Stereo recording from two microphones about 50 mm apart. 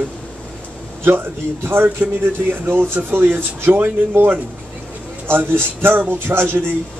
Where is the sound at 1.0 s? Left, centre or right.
Right.